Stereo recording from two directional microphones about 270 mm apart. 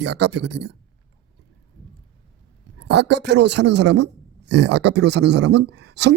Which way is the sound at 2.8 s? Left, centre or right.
Right.